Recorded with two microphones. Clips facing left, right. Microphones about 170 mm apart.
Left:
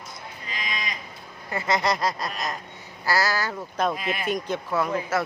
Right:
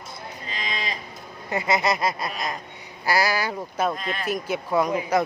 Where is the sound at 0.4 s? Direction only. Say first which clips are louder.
Right 2 dB; 30° right (ahead or behind).